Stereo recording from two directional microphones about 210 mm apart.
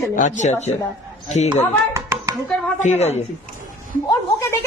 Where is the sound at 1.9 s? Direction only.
15° right (ahead or behind).